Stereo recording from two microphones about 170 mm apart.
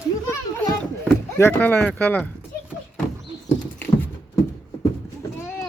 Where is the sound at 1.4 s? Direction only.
10° left (ahead or behind).